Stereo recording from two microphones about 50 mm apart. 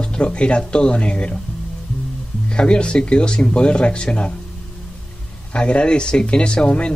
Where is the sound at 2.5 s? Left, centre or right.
Centre.